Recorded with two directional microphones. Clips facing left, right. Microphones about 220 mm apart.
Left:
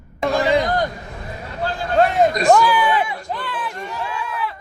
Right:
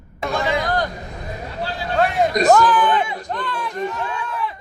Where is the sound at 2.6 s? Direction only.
10° left (ahead or behind).